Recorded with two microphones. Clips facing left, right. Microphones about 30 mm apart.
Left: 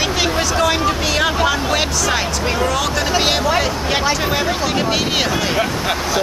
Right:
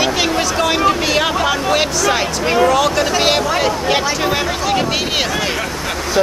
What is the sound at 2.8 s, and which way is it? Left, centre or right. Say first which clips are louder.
Speech: right 3 dB; centre.